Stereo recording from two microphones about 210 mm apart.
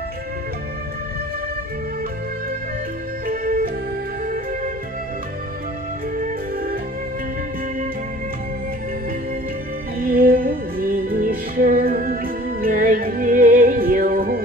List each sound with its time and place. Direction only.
3.3 s music: 40° right (ahead or behind)
6.1 s music: 40° right (ahead or behind)
9.9 s music: 45° right (ahead or behind)